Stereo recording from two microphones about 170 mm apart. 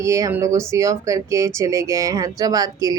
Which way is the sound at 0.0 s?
20° right (ahead or behind).